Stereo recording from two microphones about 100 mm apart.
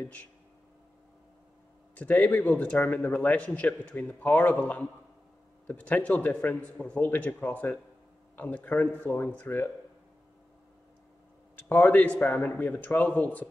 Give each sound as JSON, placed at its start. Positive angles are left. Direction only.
{"t": 0.0, "sound": "a man's voice", "side_deg": 15}
{"t": 2.0, "sound": "a man's voice", "side_deg": 15}
{"t": 11.5, "sound": "a man's voice", "side_deg": 15}